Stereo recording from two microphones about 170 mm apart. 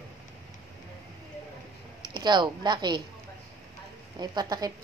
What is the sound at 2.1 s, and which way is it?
Speech, 25° right (ahead or behind).